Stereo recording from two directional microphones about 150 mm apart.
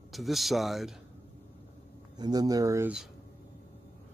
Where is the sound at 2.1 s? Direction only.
25° right (ahead or behind).